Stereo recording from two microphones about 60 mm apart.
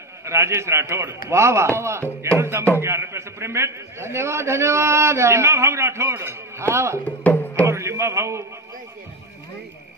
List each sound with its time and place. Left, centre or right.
0.2 s a man's voice: right
2.2 s music: right
2.8 s a man's voice: right
7.1 s music: left
7.6 s a sound: right